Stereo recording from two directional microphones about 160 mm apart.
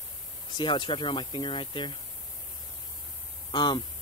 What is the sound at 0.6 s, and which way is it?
Speech, 30° left (ahead or behind).